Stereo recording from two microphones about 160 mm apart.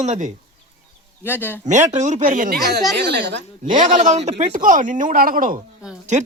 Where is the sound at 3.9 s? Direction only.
50° right (ahead or behind).